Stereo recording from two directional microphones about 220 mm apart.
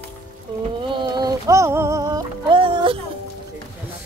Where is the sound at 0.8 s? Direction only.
20° right (ahead or behind).